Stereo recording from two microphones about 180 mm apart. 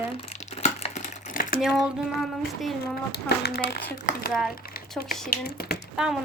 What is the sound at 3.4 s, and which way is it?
Speech, 60° left (ahead or behind).